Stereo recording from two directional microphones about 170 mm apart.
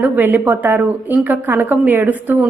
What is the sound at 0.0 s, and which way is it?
A woman's voice, 10° right (ahead or behind).